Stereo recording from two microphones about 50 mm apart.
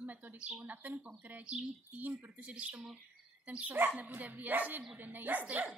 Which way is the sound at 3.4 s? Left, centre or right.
Right.